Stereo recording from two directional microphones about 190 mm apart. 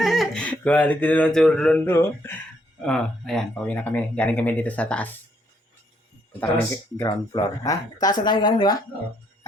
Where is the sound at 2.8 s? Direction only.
5° left (ahead or behind).